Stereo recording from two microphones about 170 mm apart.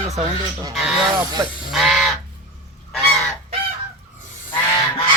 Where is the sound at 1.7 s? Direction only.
Centre (ahead or behind).